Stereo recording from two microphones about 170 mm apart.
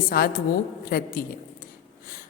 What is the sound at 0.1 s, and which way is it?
A woman's voice, 60° left (ahead or behind).